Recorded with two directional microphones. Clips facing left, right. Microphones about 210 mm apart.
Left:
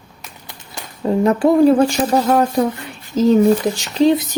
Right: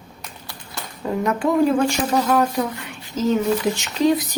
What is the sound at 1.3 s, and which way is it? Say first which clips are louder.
Speech: left 6 dB; 35° left (ahead or behind).